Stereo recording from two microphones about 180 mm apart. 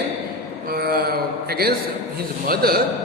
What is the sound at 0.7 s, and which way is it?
Mantra, 55° right (ahead or behind).